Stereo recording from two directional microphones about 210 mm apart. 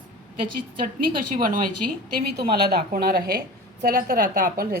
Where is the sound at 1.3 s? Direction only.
40° right (ahead or behind).